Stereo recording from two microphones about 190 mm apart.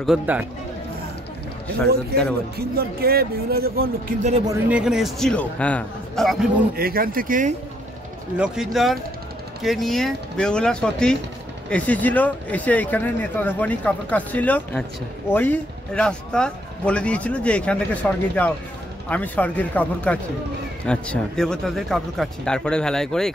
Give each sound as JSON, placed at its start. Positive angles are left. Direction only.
{"t": 0.0, "sound": "speech", "side_deg": -5}
{"t": 2.1, "sound": "a man's voice", "side_deg": -55}
{"t": 4.6, "sound": "speech", "side_deg": -5}
{"t": 6.7, "sound": "speech", "side_deg": -50}
{"t": 8.4, "sound": "speech", "side_deg": 0}